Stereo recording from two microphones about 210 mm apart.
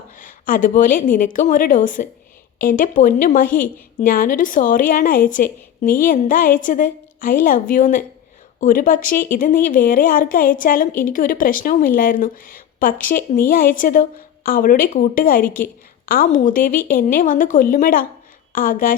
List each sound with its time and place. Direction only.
0.2 s a woman's voice: 40° left (ahead or behind)